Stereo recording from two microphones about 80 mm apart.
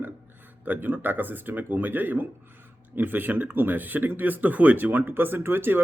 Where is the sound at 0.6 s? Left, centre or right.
Right.